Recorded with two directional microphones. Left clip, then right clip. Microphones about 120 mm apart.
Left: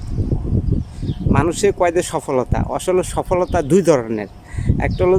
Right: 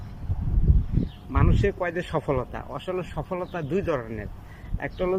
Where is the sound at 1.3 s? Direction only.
45° left (ahead or behind).